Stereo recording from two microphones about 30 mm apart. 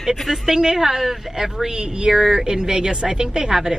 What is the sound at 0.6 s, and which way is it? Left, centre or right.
Speech, centre.